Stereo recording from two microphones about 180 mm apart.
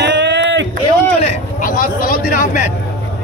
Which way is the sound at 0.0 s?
80° right.